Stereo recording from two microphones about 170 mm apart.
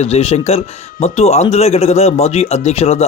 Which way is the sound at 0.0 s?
35° left (ahead or behind).